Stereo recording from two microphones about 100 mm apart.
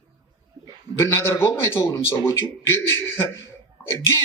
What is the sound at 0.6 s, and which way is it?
Bird, 45° right (ahead or behind).